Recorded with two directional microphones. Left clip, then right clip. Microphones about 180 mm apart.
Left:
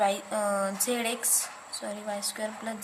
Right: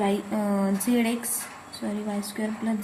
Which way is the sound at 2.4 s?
25° left (ahead or behind).